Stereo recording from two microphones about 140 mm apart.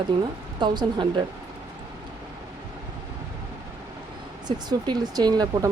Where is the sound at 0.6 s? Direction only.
30° right (ahead or behind).